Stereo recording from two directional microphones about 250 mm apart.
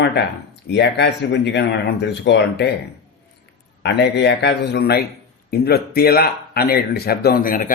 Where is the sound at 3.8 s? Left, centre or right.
Left.